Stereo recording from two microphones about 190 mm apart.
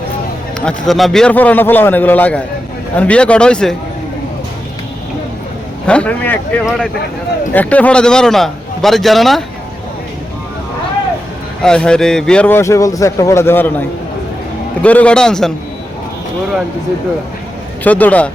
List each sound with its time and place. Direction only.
0.6 s a man's voice: 5° left (ahead or behind)
5.8 s a man's voice: 5° left (ahead or behind)
11.6 s speech: 5° left (ahead or behind)
14.8 s a man's voice: 5° left (ahead or behind)
17.8 s speech: 10° left (ahead or behind)